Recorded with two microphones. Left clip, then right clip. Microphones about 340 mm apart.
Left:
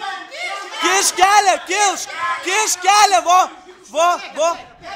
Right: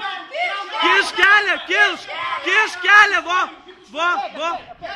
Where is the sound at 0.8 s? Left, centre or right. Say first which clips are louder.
Even; centre.